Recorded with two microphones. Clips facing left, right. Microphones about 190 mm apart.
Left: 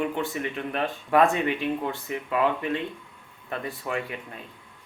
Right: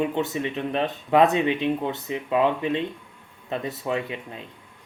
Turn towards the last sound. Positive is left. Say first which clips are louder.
# right 3 dB
turn(degrees=-20)  # may be behind; listen again after turning